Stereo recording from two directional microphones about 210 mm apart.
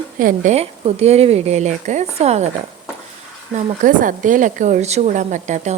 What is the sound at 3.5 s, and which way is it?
A woman's voice, 40° right (ahead or behind).